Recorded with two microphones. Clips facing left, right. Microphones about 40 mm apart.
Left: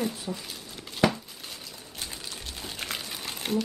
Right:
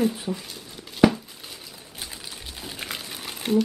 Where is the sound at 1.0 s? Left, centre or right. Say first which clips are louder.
Right 6 dB; centre.